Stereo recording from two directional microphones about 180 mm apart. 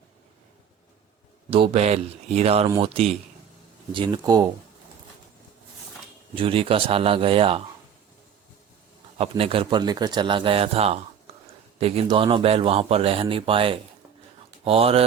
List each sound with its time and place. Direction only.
1.5 s a man's voice: 30° right (ahead or behind)
6.3 s speech: 30° right (ahead or behind)
9.1 s a man's voice: 35° right (ahead or behind)